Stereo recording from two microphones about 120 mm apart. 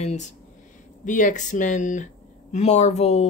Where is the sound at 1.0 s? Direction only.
90° left.